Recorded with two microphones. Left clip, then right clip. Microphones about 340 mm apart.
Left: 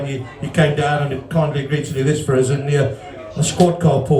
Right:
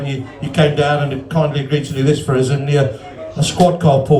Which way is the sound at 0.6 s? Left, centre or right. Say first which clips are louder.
Right 3 dB; centre.